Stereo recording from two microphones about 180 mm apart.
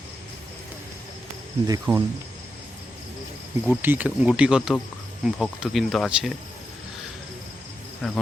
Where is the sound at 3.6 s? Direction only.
10° right (ahead or behind).